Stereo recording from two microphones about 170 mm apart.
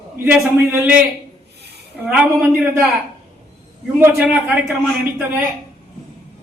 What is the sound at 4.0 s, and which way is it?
Speech, 10° right (ahead or behind).